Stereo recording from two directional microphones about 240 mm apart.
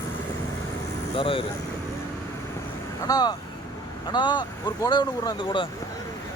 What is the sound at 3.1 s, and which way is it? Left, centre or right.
Speech, centre.